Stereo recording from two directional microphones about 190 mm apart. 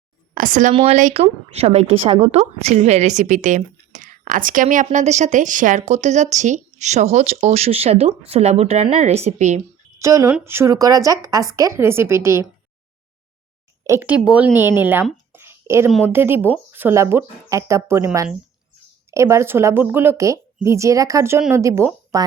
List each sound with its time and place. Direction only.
0.3 s speech: 45° right (ahead or behind)
0.7 s a woman's voice: 30° right (ahead or behind)
10.0 s a woman's voice: 15° right (ahead or behind)
13.8 s a woman's voice: 10° right (ahead or behind)
15.3 s a sound: 10° right (ahead or behind)
16.0 s a woman's voice: 10° right (ahead or behind)